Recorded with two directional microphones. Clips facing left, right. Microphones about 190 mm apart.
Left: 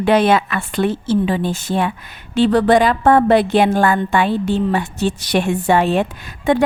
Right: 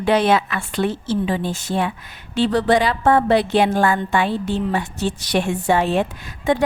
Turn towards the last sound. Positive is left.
turn(degrees=60)  # may be behind; listen again after turning